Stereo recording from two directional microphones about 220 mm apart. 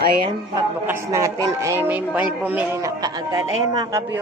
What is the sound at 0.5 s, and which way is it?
A woman's voice, 10° right (ahead or behind).